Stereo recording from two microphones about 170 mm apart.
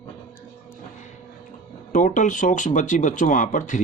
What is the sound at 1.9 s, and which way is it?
Speech, 50° left (ahead or behind).